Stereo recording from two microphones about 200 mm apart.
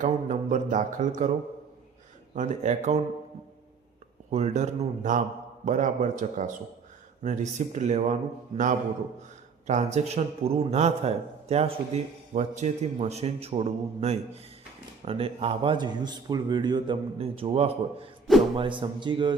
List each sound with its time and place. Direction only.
0.0 s a man's voice: 40° right (ahead or behind)
2.3 s a man's voice: 35° right (ahead or behind)
4.3 s a man's voice: 35° right (ahead or behind)